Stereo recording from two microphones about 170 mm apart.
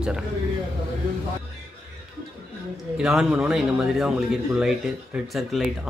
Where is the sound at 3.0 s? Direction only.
5° right (ahead or behind).